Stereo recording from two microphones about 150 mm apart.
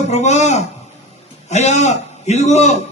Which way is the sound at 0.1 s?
50° left (ahead or behind).